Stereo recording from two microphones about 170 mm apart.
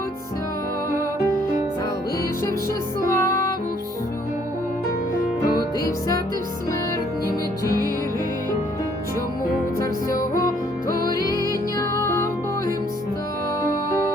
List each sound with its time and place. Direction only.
3.0 s music: 20° left (ahead or behind)
7.6 s music: 20° left (ahead or behind)
10.3 s music: 20° left (ahead or behind)